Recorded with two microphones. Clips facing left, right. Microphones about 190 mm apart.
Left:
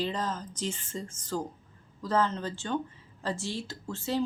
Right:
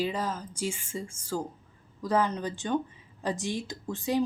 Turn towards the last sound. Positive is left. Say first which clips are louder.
# right 3 dB
turn(degrees=-15)  # may be behind; listen again after turning